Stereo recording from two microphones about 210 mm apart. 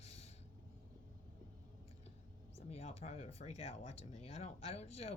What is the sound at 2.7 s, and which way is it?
Speech, 30° left (ahead or behind).